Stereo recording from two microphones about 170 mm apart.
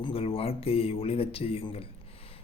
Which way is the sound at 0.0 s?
35° left (ahead or behind).